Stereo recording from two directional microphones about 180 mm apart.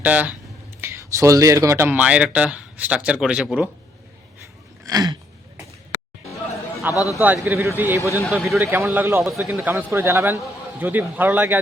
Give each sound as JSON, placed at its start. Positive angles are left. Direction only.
{"t": 0.0, "sound": "speech", "side_deg": -10}
{"t": 4.9, "sound": "speech", "side_deg": -20}
{"t": 6.9, "sound": "a man's voice", "side_deg": 20}
{"t": 7.2, "sound": "speech", "side_deg": -10}
{"t": 8.0, "sound": "a man's voice", "side_deg": 15}
{"t": 8.3, "sound": "a man's voice", "side_deg": 0}
{"t": 8.5, "sound": "speech", "side_deg": -10}